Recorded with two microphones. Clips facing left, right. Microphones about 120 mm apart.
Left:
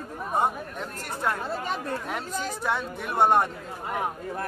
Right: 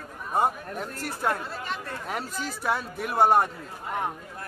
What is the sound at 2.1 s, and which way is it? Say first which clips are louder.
Speech: left 1 dB; centre (ahead or behind).